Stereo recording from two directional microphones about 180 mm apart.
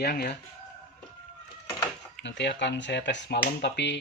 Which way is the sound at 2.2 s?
75° left (ahead or behind).